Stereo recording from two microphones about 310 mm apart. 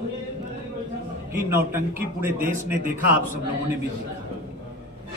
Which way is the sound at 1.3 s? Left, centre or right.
Centre.